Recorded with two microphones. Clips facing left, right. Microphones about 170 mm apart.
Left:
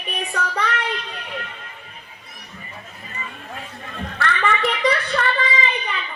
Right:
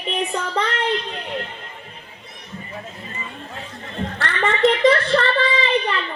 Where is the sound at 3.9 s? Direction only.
25° right (ahead or behind).